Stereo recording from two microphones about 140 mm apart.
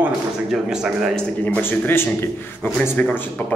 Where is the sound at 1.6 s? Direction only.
15° left (ahead or behind).